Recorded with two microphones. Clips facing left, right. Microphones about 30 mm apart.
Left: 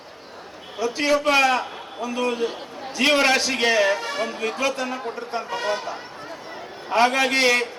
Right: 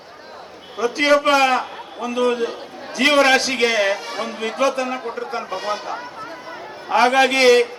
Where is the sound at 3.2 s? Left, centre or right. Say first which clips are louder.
Right 4 dB; right.